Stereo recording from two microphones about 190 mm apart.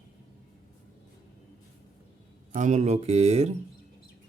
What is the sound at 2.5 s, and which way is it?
Speech, 40° right (ahead or behind).